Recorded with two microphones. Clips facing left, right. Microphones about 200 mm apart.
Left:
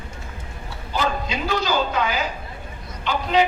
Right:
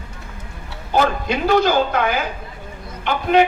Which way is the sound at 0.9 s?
55° right (ahead or behind).